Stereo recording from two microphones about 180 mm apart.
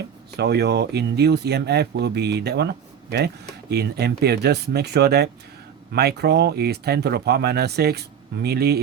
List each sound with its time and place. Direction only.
0.3 s speech: 65° right (ahead or behind)
3.7 s speech: 65° right (ahead or behind)